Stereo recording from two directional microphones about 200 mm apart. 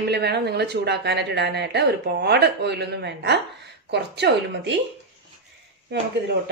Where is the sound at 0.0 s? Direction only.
55° right (ahead or behind).